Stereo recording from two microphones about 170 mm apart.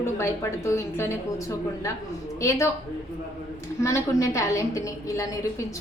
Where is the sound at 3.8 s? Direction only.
15° left (ahead or behind).